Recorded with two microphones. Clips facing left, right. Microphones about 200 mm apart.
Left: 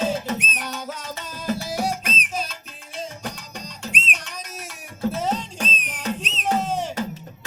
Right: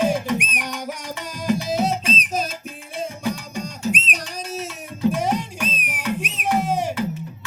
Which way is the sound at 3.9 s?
40° right (ahead or behind).